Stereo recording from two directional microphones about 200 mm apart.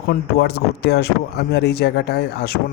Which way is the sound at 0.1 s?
55° left (ahead or behind).